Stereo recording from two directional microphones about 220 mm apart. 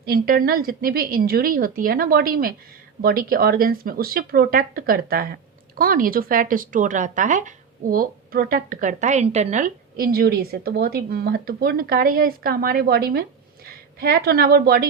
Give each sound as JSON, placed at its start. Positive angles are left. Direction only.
{"t": 0.0, "sound": "a woman's voice", "side_deg": -40}